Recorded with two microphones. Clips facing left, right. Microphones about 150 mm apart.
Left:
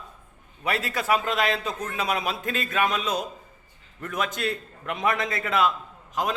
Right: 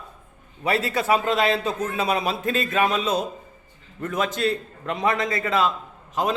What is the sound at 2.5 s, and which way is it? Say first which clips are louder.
A man's voice: right 4 dB; centre (ahead or behind).